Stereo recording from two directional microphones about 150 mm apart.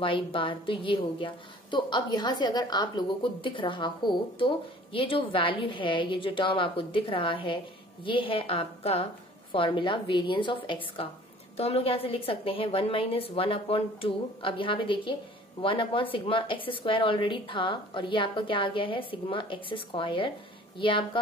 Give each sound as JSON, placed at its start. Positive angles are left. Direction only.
{"t": 0.0, "sound": "a woman's voice", "side_deg": 35}